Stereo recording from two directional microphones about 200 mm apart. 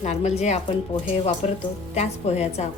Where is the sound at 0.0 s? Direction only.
35° left (ahead or behind).